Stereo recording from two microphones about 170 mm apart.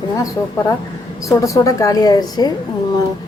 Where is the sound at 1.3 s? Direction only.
20° left (ahead or behind).